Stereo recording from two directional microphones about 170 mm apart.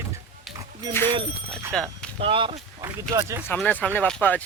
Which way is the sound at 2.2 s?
30° right (ahead or behind).